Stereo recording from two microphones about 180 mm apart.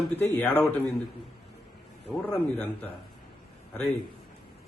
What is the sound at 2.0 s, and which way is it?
Speech, 10° left (ahead or behind).